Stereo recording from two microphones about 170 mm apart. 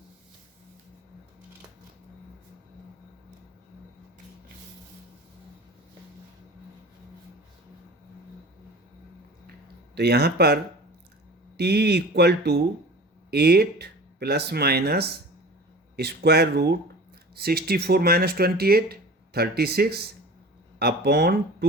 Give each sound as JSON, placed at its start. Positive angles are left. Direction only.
{"t": 9.9, "sound": "speech", "side_deg": -75}